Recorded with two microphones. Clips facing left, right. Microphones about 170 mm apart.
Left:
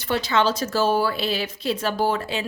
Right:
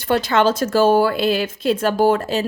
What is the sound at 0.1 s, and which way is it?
A woman's voice, 50° right (ahead or behind).